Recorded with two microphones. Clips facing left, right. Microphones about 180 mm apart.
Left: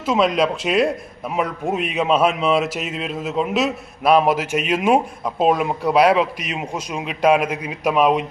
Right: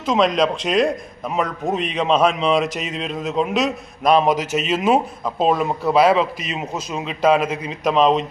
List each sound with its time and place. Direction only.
0.0 s a man's voice: 5° left (ahead or behind)